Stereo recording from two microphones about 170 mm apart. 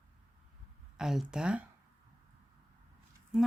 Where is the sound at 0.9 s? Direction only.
Centre (ahead or behind).